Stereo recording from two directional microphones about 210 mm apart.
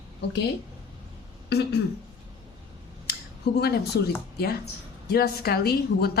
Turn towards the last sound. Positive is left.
turn(degrees=50)  # may be behind; listen again after turning